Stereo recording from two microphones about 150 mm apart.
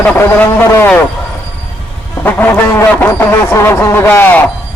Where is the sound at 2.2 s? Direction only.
15° left (ahead or behind).